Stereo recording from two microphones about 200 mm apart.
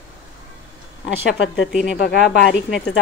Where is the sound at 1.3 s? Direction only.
65° left (ahead or behind).